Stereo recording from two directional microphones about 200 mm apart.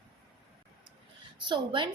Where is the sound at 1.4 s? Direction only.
25° right (ahead or behind).